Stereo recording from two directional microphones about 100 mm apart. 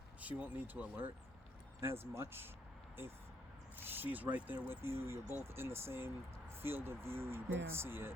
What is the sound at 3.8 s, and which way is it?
Speech, 20° right (ahead or behind).